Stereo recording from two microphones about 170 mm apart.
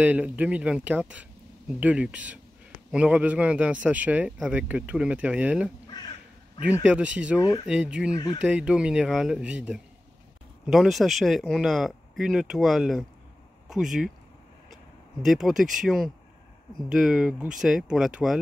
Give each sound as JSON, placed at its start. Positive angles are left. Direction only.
{"t": 0.0, "sound": "speech", "side_deg": -10}
{"t": 6.9, "sound": "speech", "side_deg": -5}
{"t": 15.2, "sound": "speech", "side_deg": 0}